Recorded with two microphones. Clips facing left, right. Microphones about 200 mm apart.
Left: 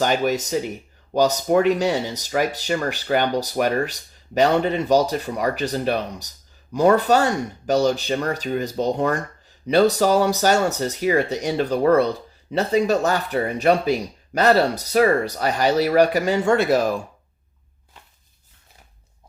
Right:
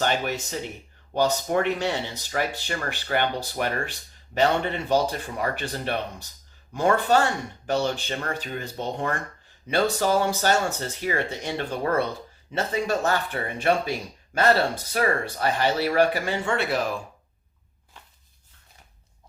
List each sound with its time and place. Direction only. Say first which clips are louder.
0.1 s speech: left 7 dB; 40° left (ahead or behind)